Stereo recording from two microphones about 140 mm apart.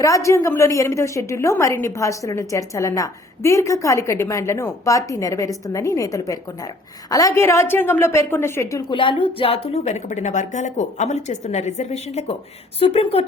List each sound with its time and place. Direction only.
0.0 s a woman's voice: 20° left (ahead or behind)
8.9 s a woman's voice: 35° left (ahead or behind)